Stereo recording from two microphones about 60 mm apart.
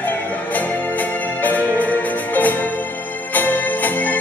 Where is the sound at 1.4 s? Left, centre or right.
Left.